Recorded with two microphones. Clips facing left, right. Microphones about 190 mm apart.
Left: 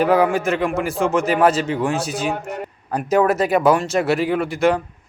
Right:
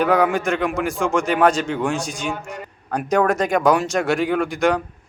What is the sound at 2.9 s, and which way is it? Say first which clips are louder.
Speech: left 1 dB; 5° left (ahead or behind).